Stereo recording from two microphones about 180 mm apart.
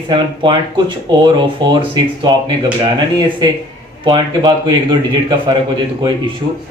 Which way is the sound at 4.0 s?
25° right (ahead or behind).